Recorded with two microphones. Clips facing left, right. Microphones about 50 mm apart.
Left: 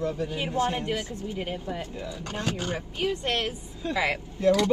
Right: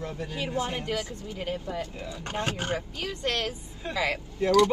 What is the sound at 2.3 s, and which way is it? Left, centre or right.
Speech, right.